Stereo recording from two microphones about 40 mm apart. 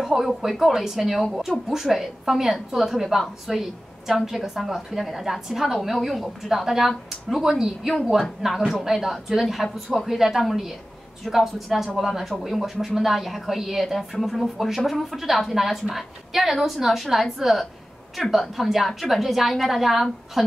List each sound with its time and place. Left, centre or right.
0.0 s a woman's voice: centre